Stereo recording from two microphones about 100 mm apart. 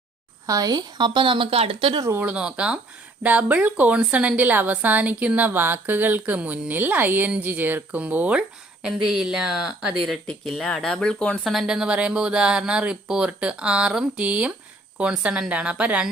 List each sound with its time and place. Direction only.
0.4 s speech: 35° right (ahead or behind); by 1.9 s 70° right (ahead or behind)
2.2 s a woman's voice: 10° right (ahead or behind)
10.2 s a woman's voice: 5° left (ahead or behind); by 16.0 s 10° right (ahead or behind)